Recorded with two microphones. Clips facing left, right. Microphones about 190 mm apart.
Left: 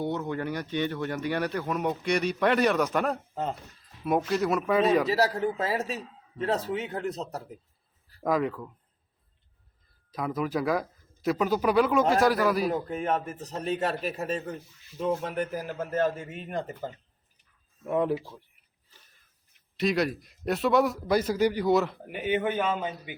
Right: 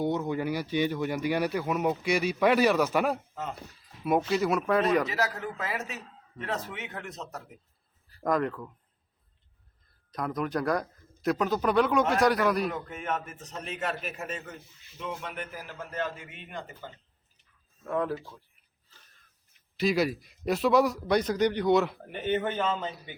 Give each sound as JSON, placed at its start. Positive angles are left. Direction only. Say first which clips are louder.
{"t": 0.0, "sound": "speech", "louder": "right 2 dB", "side_deg": -10}
{"t": 4.3, "sound": "speech", "louder": "even", "side_deg": 0}
{"t": 5.0, "sound": "a man's voice", "louder": "left 6 dB", "side_deg": 35}
{"t": 6.0, "sound": "a sound", "louder": "left 5 dB", "side_deg": 5}
{"t": 6.4, "sound": "a man's voice", "louder": "left 7 dB", "side_deg": 35}
{"t": 8.2, "sound": "speech", "louder": "left 1 dB", "side_deg": 5}
{"t": 10.1, "sound": "speech", "louder": "left 1 dB", "side_deg": 5}
{"t": 12.7, "sound": "a man's voice", "louder": "left 5 dB", "side_deg": 35}
{"t": 17.8, "sound": "speech", "louder": "left 4 dB", "side_deg": 20}
{"t": 19.7, "sound": "speech", "louder": "even", "side_deg": 0}